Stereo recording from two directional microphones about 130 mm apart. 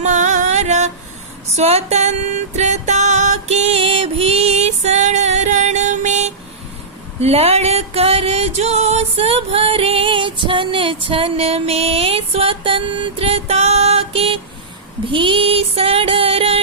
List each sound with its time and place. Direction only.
0.0 s music: 65° right (ahead or behind)
7.2 s music: 55° right (ahead or behind)